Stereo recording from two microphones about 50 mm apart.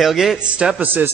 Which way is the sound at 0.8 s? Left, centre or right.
Right.